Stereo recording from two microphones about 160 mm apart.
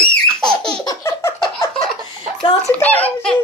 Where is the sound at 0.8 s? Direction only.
20° left (ahead or behind).